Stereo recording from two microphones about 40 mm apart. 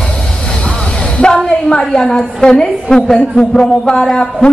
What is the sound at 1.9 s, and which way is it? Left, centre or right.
A woman's voice, centre.